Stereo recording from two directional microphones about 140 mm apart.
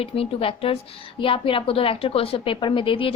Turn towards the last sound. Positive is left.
turn(degrees=40)  # may be behind; listen again after turning